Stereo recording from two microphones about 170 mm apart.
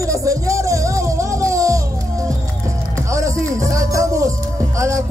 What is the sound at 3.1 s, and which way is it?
Music, 20° right (ahead or behind).